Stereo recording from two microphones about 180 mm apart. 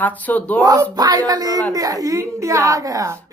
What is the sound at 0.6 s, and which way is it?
Speech, 20° right (ahead or behind).